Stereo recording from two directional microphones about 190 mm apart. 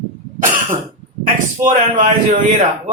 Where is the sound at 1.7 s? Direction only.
40° right (ahead or behind).